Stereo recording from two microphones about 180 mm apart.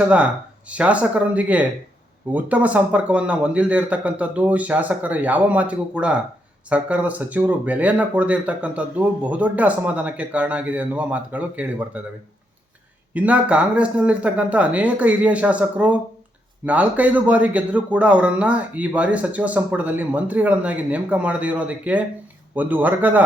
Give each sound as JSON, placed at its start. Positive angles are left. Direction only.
{"t": 0.7, "sound": "speech", "side_deg": -5}
{"t": 13.1, "sound": "speech", "side_deg": -10}